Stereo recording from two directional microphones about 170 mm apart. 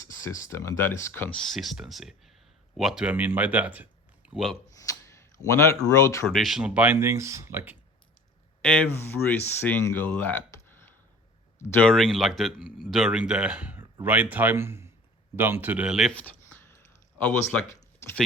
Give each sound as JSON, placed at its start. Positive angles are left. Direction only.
{"t": 0.2, "sound": "speech", "side_deg": 20}
{"t": 1.5, "sound": "speech", "side_deg": 0}
{"t": 4.9, "sound": "a sound", "side_deg": 20}
{"t": 6.2, "sound": "speech", "side_deg": 0}
{"t": 8.6, "sound": "speech", "side_deg": 10}
{"t": 11.6, "sound": "speech", "side_deg": 5}
{"t": 16.1, "sound": "a sound", "side_deg": 10}
{"t": 17.2, "sound": "speech", "side_deg": 10}